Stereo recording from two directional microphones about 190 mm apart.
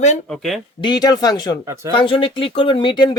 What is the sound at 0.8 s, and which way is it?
Speech, 20° left (ahead or behind).